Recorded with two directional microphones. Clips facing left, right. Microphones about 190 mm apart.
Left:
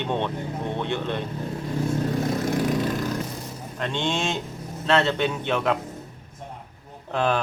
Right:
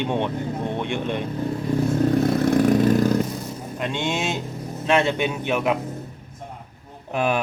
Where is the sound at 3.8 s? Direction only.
10° right (ahead or behind).